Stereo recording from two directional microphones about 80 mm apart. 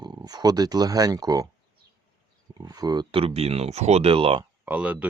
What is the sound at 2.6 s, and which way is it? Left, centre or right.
Speech, right.